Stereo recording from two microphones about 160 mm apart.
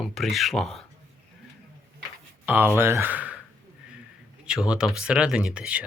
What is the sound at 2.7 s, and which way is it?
Speech, 15° right (ahead or behind).